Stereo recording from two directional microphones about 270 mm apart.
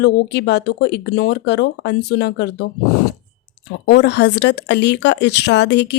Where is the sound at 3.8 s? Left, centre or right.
Left.